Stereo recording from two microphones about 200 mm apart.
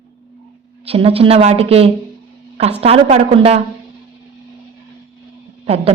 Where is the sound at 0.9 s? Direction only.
30° right (ahead or behind).